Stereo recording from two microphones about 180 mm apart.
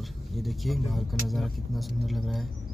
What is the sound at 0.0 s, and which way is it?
Speech, centre (ahead or behind).